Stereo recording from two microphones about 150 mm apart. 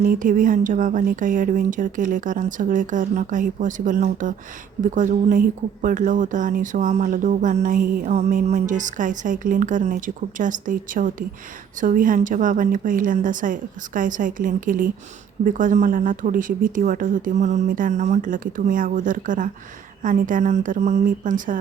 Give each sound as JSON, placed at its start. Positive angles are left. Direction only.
{"t": 0.0, "sound": "a woman's voice", "side_deg": -60}